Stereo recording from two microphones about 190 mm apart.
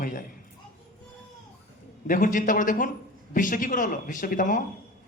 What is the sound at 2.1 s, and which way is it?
A man's voice, 45° left (ahead or behind).